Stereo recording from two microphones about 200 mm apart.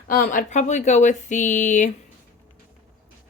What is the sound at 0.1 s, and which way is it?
Speech, 40° left (ahead or behind).